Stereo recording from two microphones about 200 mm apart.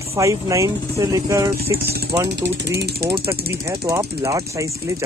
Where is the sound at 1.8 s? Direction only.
50° right (ahead or behind).